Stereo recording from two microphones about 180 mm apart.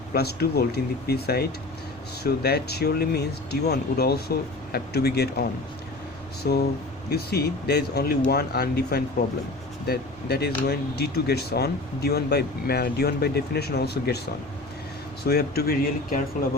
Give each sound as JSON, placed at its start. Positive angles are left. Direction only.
{"t": 0.1, "sound": "speech", "side_deg": 60}
{"t": 15.2, "sound": "speech", "side_deg": 60}